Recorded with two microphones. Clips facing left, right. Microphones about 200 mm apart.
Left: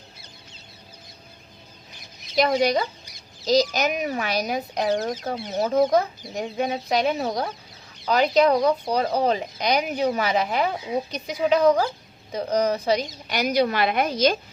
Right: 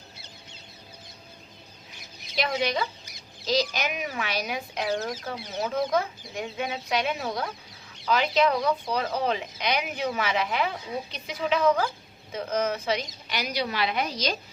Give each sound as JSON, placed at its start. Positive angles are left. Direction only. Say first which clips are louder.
{"t": 2.3, "sound": "speech", "louder": "left 7 dB", "side_deg": 40}
{"t": 4.9, "sound": "speech", "louder": "left 4 dB", "side_deg": 25}
{"t": 5.2, "sound": "a woman's voice", "louder": "left 6 dB", "side_deg": 35}